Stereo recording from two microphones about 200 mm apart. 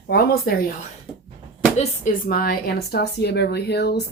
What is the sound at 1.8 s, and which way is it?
A woman's voice, 45° left (ahead or behind).